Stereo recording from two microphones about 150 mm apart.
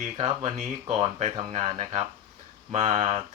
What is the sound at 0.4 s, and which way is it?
Speech, 45° right (ahead or behind).